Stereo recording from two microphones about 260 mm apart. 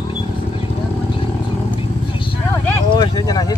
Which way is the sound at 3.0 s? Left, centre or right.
Centre.